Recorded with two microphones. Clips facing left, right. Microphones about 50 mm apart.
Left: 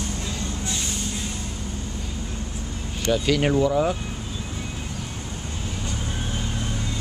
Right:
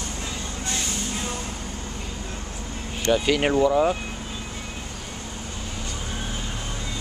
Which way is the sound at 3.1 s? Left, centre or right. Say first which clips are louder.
Even; centre.